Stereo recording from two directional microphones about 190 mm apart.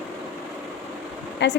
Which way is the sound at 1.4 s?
70° left (ahead or behind).